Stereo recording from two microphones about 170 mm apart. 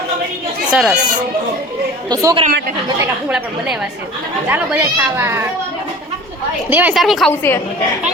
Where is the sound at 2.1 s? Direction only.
20° right (ahead or behind).